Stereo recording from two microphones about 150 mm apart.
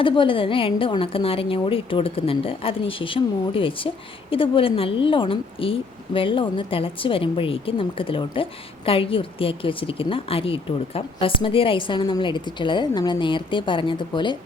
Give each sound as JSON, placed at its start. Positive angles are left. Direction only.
{"t": 0.0, "sound": "a woman's voice", "side_deg": 35}